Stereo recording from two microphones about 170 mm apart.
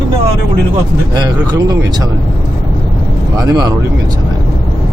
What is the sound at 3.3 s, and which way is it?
Speech, 20° right (ahead or behind).